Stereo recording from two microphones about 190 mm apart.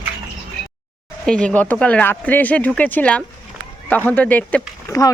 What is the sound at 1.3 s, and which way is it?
Speech, 5° left (ahead or behind).